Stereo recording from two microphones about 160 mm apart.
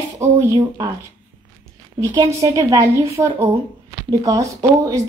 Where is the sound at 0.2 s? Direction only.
20° right (ahead or behind).